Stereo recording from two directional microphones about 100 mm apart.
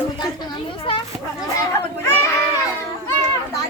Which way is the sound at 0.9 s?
60° left (ahead or behind).